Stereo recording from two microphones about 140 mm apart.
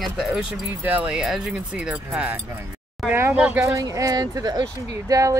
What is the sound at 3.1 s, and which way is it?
Speech, 15° right (ahead or behind).